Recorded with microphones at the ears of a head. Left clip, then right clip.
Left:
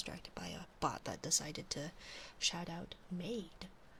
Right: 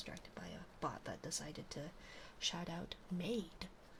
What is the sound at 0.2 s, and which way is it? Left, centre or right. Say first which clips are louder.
Speech: left 4 dB; left.